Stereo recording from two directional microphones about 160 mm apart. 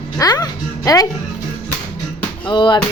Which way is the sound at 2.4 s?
30° left (ahead or behind).